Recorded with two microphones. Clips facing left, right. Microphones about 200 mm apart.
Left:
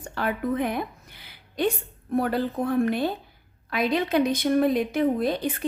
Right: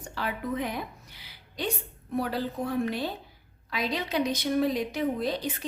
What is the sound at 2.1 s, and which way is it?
Speech, 55° left (ahead or behind).